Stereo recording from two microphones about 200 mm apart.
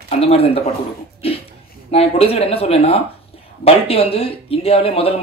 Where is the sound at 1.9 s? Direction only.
30° left (ahead or behind).